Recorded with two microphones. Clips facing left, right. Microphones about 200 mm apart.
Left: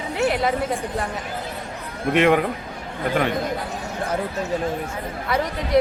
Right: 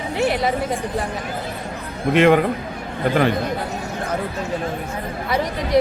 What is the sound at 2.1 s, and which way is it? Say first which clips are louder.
Speech: right 3 dB; centre (ahead or behind).